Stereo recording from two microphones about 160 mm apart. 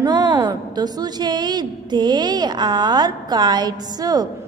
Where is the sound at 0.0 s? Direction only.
25° right (ahead or behind).